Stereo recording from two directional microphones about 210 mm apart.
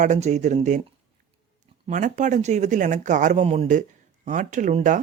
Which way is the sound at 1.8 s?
35° right (ahead or behind).